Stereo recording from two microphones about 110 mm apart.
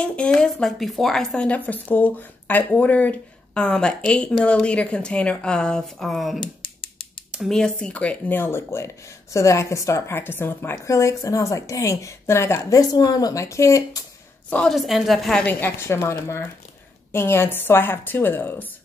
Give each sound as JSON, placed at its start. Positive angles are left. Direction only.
{"t": 0.0, "sound": "speech", "side_deg": 10}
{"t": 14.7, "sound": "a woman's voice", "side_deg": 0}
{"t": 15.4, "sound": "speech", "side_deg": 20}